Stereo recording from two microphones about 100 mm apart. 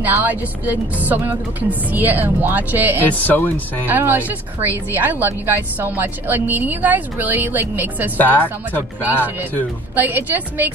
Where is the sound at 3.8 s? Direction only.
20° right (ahead or behind).